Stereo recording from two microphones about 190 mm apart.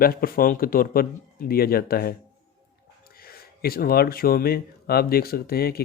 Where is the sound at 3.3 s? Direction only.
55° left (ahead or behind).